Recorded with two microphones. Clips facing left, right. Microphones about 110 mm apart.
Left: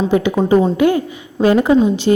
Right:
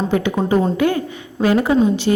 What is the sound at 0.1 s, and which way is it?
A woman's voice, 15° left (ahead or behind).